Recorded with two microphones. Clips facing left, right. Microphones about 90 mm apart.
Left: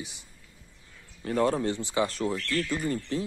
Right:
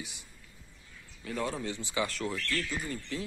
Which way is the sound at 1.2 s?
45° left (ahead or behind).